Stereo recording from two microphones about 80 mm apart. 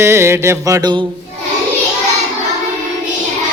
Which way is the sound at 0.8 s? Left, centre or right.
Right.